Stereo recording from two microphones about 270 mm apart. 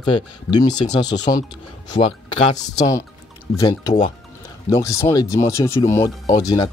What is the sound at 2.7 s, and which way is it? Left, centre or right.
Speech, centre.